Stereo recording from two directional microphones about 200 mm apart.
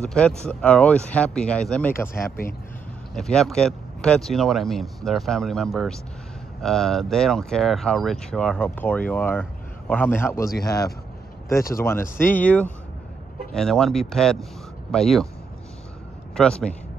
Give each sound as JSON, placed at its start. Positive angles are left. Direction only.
{"t": 0.0, "sound": "speech", "side_deg": 5}
{"t": 16.3, "sound": "speech", "side_deg": 5}